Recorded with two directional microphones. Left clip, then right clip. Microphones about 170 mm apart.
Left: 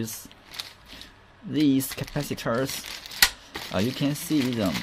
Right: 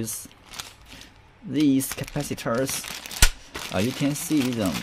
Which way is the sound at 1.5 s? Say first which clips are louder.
Right 1 dB; 5° right (ahead or behind).